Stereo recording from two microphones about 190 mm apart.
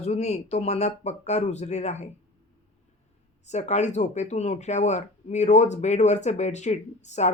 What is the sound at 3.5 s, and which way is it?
Speech, 35° left (ahead or behind).